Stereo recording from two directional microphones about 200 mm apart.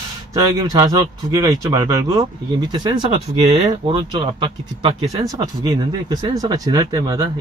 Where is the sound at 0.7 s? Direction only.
20° right (ahead or behind).